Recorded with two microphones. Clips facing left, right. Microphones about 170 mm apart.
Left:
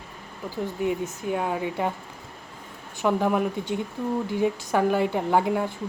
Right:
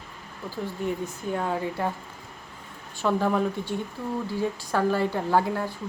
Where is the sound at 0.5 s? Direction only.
15° left (ahead or behind).